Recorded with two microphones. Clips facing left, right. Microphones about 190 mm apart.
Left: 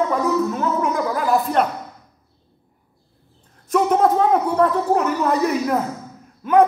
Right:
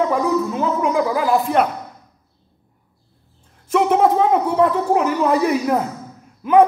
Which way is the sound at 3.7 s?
5° right (ahead or behind).